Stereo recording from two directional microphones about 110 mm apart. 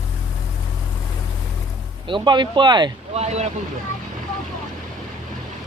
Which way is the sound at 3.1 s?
85° right.